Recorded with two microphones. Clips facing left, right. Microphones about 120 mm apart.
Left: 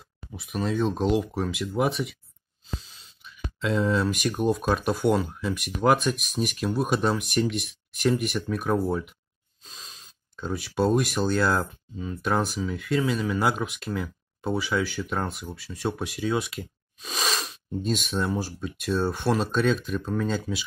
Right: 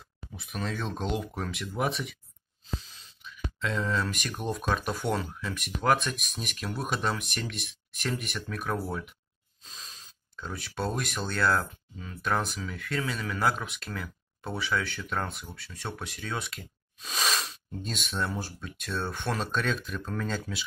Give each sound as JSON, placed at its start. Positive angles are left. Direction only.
{"t": 0.4, "sound": "speech", "side_deg": 5}
{"t": 3.6, "sound": "speech", "side_deg": 10}
{"t": 10.3, "sound": "speech", "side_deg": 15}